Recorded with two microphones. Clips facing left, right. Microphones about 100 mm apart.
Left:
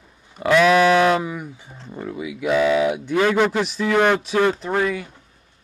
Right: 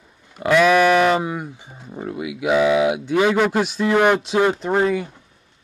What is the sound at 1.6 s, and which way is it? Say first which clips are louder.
Speech: right 1 dB; 10° right (ahead or behind).